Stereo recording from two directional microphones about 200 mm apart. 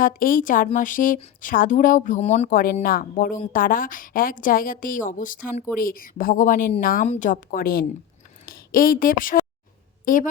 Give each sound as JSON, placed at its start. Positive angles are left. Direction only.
{"t": 0.0, "sound": "a woman's voice", "side_deg": 45}